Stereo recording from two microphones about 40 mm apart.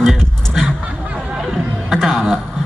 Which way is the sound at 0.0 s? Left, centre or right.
Centre.